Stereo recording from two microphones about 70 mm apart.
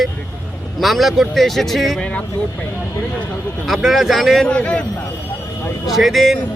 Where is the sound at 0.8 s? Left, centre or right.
Centre.